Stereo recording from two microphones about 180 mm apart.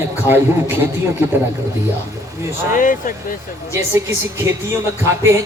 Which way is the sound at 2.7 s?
45° left (ahead or behind).